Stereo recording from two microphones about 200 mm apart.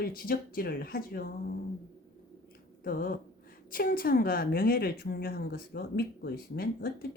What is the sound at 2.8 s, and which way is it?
A woman's voice, 45° left (ahead or behind).